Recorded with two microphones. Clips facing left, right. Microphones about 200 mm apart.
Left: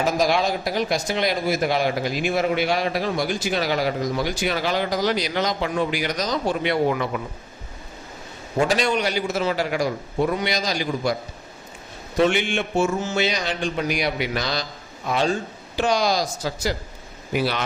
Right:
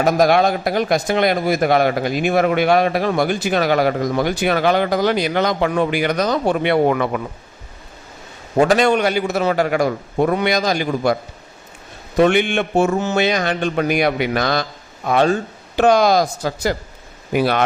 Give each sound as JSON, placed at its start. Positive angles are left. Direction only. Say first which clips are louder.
{"t": 0.0, "sound": "speech", "louder": "right 6 dB", "side_deg": -55}
{"t": 8.5, "sound": "a man's voice", "louder": "right 7 dB", "side_deg": -55}